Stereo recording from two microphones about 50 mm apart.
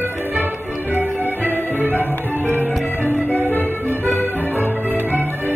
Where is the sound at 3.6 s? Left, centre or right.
Left.